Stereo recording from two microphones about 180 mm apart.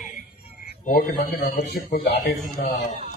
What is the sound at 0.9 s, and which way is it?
A man's voice, 50° left (ahead or behind).